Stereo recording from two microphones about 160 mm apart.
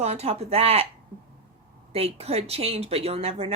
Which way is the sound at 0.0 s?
40° right (ahead or behind).